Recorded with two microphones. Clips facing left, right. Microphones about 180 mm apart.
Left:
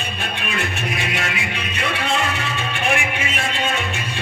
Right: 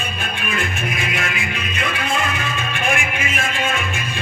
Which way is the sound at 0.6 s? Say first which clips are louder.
Left 1 dB; 35° left (ahead or behind).